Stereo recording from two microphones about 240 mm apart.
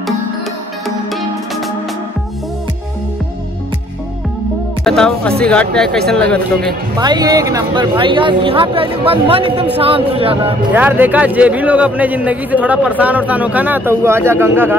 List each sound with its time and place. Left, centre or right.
0.8 s music: centre
4.8 s speech: centre
7.0 s speech: centre
10.7 s a man's voice: centre